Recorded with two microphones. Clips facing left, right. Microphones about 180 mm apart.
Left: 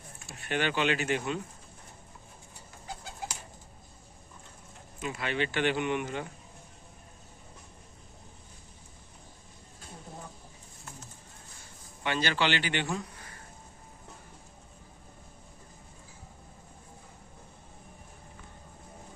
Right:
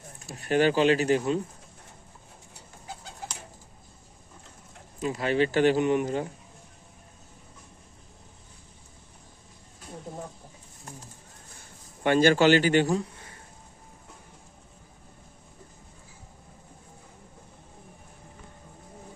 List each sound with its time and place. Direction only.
0.2 s speech: 40° right (ahead or behind)
4.9 s speech: 35° right (ahead or behind)
12.0 s a man's voice: 45° right (ahead or behind); by 13.3 s 25° right (ahead or behind)